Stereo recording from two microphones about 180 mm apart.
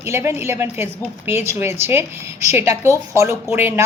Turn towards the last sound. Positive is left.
turn(degrees=-15)  # may be behind; listen again after turning